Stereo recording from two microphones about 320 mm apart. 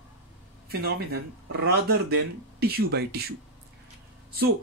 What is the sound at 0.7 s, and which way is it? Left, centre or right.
Speech, right.